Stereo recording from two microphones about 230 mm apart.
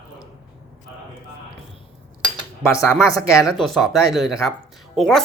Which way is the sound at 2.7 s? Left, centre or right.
Centre.